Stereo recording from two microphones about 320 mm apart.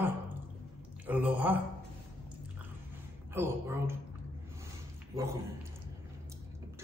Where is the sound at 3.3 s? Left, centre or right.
Centre.